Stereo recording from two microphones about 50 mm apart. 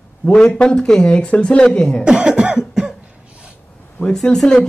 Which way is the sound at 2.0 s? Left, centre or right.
Centre.